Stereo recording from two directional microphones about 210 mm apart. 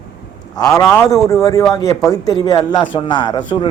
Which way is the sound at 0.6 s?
15° left (ahead or behind).